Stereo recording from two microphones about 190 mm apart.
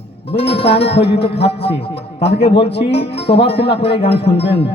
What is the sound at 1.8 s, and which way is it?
Speech, 30° left (ahead or behind).